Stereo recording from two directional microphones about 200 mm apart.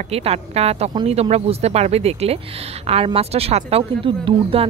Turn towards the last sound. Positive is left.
turn(degrees=-25)  # may be behind; listen again after turning